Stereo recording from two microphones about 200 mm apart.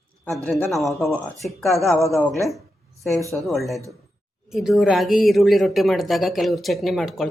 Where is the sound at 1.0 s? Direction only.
Centre (ahead or behind).